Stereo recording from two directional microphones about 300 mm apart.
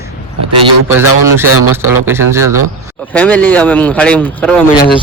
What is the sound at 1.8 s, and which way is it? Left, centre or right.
Speech, centre.